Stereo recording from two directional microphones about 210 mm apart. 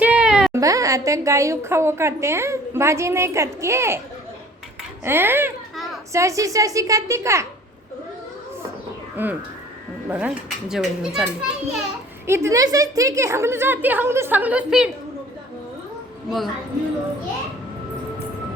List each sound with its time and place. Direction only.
0.0 s a sound: 5° right (ahead or behind)
0.5 s a woman's voice: 15° right (ahead or behind)
5.0 s a woman's voice: 10° right (ahead or behind)
9.2 s a woman's voice: 10° right (ahead or behind)